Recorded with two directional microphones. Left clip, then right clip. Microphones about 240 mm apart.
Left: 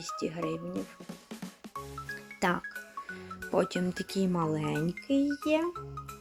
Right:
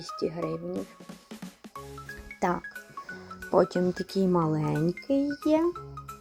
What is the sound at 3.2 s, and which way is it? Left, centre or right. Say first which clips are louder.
Speech: right 6 dB; centre.